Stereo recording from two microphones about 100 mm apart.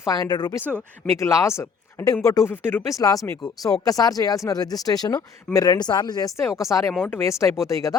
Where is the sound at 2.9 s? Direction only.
35° left (ahead or behind).